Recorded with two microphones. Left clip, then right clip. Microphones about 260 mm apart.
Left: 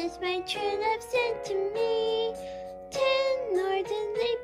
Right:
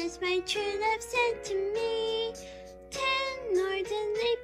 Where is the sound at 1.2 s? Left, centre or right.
Left.